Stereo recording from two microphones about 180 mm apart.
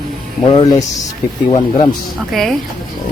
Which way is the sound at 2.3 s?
Centre (ahead or behind).